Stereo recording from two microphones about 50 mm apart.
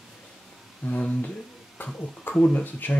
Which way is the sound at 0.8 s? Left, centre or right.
Left.